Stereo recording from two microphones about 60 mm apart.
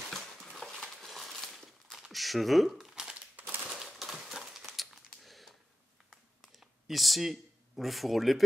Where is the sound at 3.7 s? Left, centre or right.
Centre.